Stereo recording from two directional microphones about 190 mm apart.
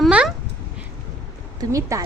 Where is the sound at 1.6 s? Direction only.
15° right (ahead or behind).